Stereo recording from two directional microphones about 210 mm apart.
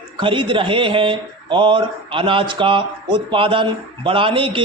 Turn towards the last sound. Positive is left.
turn(degrees=-25)  # may be behind; listen again after turning